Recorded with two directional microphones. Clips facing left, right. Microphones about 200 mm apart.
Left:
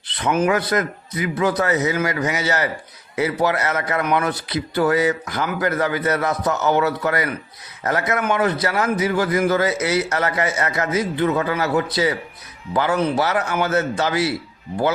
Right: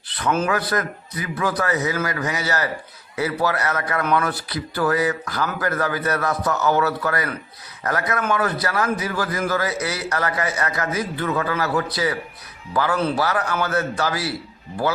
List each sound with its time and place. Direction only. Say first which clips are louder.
0.1 s speech: left 3 dB; 15° left (ahead or behind)